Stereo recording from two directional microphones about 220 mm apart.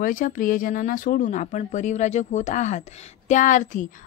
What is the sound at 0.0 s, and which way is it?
Speech, 35° left (ahead or behind).